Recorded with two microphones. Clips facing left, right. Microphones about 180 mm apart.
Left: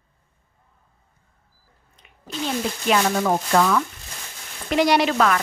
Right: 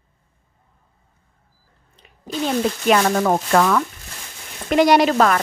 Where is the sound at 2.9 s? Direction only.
55° right (ahead or behind).